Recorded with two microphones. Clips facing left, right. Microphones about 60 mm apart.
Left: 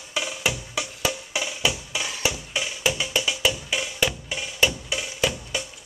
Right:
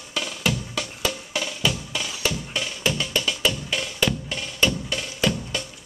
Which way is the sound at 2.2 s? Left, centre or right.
Centre.